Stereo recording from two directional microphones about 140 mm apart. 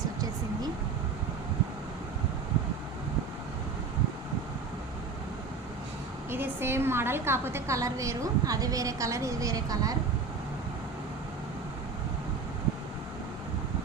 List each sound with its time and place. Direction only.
6.3 s a woman's voice: 15° right (ahead or behind)